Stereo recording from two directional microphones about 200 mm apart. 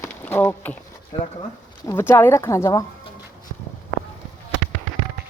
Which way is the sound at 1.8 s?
10° left (ahead or behind).